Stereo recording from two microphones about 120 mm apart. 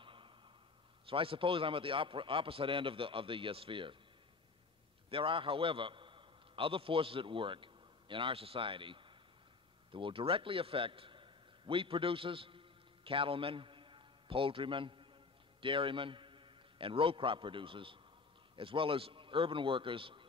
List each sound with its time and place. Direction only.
0.0 s a sound: 45° right (ahead or behind)
1.0 s a man's voice: 50° right (ahead or behind)
5.1 s a man's voice: 45° right (ahead or behind)